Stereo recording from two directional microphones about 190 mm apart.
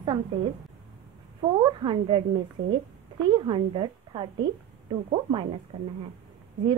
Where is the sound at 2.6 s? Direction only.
90° right.